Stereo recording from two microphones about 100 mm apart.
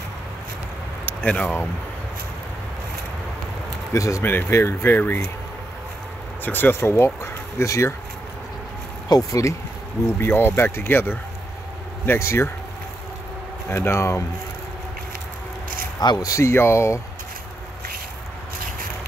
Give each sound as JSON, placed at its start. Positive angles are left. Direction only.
{"t": 1.0, "sound": "speech", "side_deg": 15}
{"t": 3.9, "sound": "speech", "side_deg": 30}
{"t": 6.4, "sound": "speech", "side_deg": 20}
{"t": 9.1, "sound": "speech", "side_deg": 35}
{"t": 10.0, "sound": "speech", "side_deg": 20}
{"t": 13.7, "sound": "speech", "side_deg": 25}
{"t": 16.0, "sound": "speech", "side_deg": 40}